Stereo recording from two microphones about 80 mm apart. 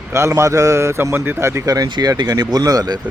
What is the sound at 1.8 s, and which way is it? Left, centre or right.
Speech, right.